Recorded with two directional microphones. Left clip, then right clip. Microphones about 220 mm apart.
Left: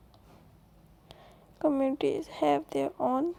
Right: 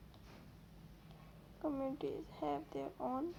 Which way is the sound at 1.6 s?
40° left (ahead or behind).